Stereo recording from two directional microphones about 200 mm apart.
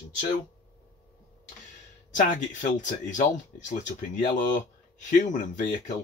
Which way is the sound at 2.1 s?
40° left (ahead or behind).